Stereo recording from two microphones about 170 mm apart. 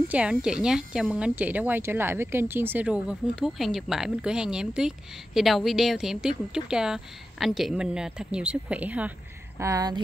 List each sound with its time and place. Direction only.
0.1 s a woman's voice: 5° right (ahead or behind)
9.6 s speech: 20° right (ahead or behind)